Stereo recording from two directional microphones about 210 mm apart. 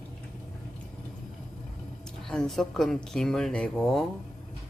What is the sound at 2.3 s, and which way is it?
Speech, centre (ahead or behind).